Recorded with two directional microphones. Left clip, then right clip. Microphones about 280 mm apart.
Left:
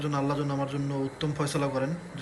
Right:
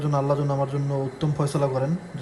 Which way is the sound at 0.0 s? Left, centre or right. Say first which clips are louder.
Right 5 dB; centre.